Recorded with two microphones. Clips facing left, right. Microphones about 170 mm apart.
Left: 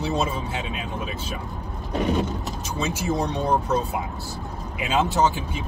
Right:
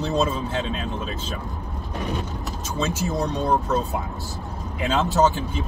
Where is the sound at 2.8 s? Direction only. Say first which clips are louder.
Right 2 dB; 10° left (ahead or behind).